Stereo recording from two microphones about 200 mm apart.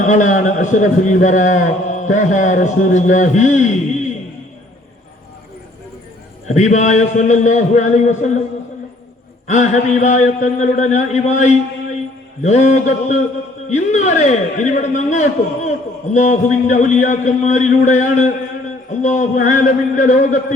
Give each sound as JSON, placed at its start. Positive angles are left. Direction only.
{"t": 0.1, "sound": "a man's voice", "side_deg": 40}
{"t": 6.5, "sound": "a man's voice", "side_deg": 35}
{"t": 9.5, "sound": "a man's voice", "side_deg": 35}